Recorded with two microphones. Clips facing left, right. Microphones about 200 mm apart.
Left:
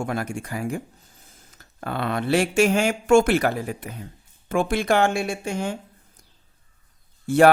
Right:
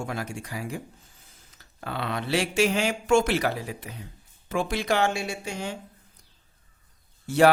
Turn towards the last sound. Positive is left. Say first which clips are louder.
# left 4 dB
turn(degrees=50)  # may be behind; listen again after turning